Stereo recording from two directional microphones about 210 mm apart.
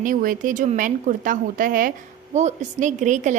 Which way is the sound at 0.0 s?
40° right (ahead or behind).